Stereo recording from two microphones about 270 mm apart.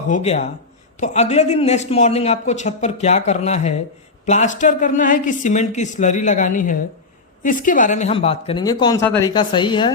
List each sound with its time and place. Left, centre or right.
0.1 s speech: left